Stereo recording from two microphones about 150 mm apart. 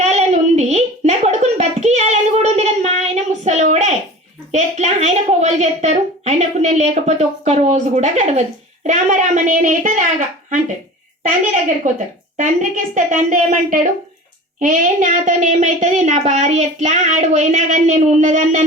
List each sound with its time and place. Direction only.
0.0 s a sound: 45° right (ahead or behind)
4.5 s a woman's voice: 50° right (ahead or behind)
12.4 s a child's voice: 55° right (ahead or behind)